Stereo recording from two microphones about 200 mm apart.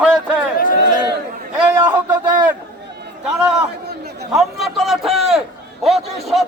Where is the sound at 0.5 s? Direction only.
40° left (ahead or behind).